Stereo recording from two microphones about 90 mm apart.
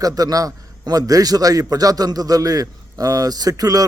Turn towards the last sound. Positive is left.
turn(degrees=-45)  # may be behind; listen again after turning